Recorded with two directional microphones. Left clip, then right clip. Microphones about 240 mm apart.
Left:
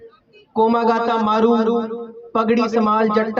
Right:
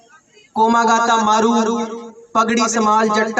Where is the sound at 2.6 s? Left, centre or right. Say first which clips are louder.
Right 2 dB; left.